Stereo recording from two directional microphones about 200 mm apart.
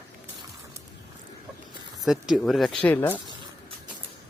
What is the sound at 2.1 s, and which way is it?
Speech, centre (ahead or behind).